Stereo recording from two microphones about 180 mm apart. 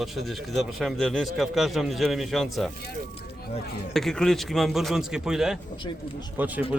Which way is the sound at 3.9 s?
Centre (ahead or behind).